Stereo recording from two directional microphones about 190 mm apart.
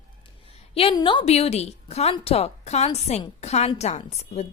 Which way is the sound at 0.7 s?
30° left (ahead or behind).